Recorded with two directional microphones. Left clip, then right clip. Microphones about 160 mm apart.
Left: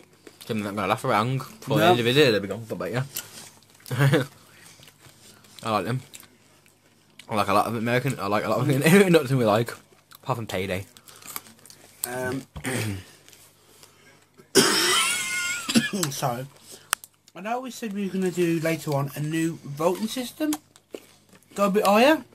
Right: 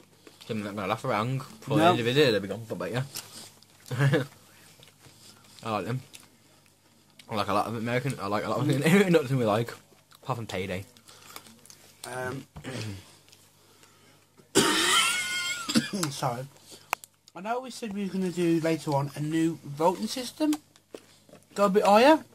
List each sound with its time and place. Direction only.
0.4 s speech: 20° left (ahead or behind)
3.9 s speech: 20° left (ahead or behind)
5.6 s speech: 20° left (ahead or behind)
7.2 s speech: 20° left (ahead or behind)
11.4 s crumpling: 25° left (ahead or behind)
14.7 s a sound: 25° right (ahead or behind)
17.3 s speech: 30° right (ahead or behind)
20.4 s a sound: 15° left (ahead or behind)
21.5 s speech: 35° right (ahead or behind)